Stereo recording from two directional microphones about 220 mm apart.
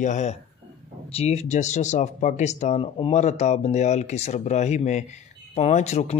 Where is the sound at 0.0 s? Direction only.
35° left (ahead or behind).